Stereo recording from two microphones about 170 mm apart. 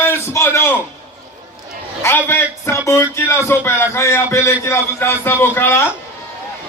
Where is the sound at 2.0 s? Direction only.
15° left (ahead or behind).